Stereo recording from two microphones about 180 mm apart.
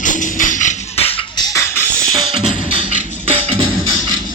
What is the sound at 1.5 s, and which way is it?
Music, 15° left (ahead or behind).